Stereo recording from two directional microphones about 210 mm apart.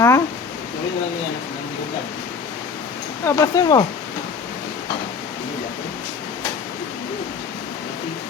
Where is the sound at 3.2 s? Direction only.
15° left (ahead or behind).